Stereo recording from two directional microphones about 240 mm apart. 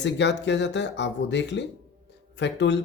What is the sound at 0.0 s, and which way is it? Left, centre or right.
Speech, left.